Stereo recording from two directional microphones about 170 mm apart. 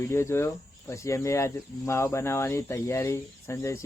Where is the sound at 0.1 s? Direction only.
15° left (ahead or behind).